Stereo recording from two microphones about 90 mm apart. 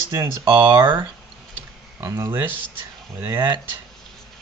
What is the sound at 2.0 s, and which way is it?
Speech, 30° right (ahead or behind).